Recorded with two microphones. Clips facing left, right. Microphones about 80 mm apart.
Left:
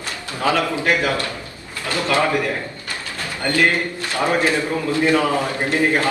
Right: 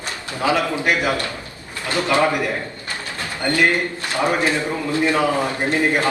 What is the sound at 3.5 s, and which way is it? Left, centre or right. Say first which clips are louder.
Speech: even; right.